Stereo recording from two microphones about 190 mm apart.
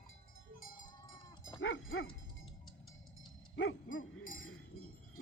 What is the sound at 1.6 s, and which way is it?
Dog, 90° left.